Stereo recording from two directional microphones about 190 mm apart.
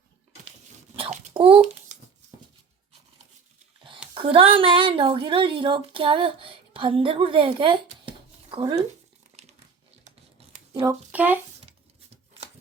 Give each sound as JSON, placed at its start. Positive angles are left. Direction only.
{"t": 0.9, "sound": "babbling", "side_deg": -35}
{"t": 4.1, "sound": "speech", "side_deg": -25}
{"t": 9.4, "sound": "crumpling", "side_deg": -35}
{"t": 10.4, "sound": "a sound", "side_deg": -30}
{"t": 10.8, "sound": "a child's voice", "side_deg": -10}